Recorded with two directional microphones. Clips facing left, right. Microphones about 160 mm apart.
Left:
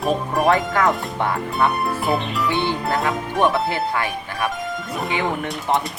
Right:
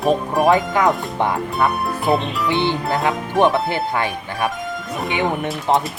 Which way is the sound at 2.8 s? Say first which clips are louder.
Right 1 dB; centre (ahead or behind).